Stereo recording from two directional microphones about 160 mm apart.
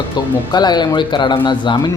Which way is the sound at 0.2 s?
25° left (ahead or behind).